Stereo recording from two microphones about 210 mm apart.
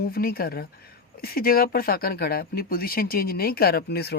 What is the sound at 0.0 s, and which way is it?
Speech, 45° left (ahead or behind).